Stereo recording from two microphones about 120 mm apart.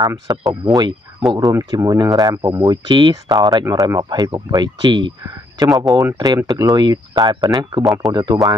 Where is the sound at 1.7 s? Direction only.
35° right (ahead or behind).